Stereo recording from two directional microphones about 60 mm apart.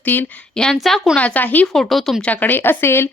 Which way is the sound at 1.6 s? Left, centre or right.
Centre.